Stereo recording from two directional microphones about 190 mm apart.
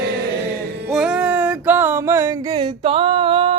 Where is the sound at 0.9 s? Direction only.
5° right (ahead or behind).